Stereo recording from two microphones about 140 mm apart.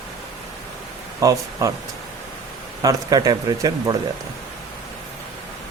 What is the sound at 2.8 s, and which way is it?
Speech, 25° right (ahead or behind).